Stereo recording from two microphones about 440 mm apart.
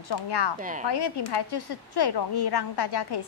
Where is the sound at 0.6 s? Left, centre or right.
Centre.